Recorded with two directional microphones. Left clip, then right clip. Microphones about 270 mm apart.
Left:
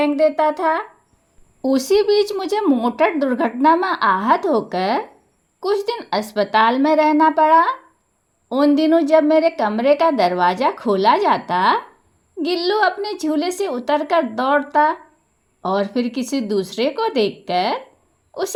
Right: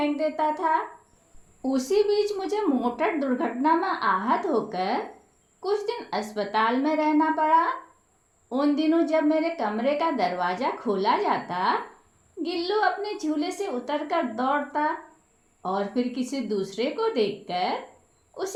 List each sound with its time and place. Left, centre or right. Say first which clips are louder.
0.0 s a woman's voice: left 9 dB; left